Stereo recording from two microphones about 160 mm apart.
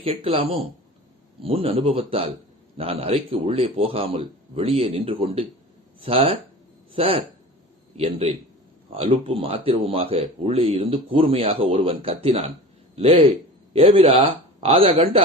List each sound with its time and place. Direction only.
0.0 s speech: 40° right (ahead or behind)